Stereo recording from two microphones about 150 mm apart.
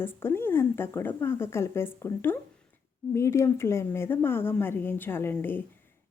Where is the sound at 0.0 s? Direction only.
15° left (ahead or behind).